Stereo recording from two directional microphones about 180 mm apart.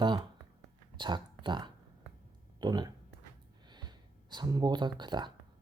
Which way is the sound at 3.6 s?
25° right (ahead or behind).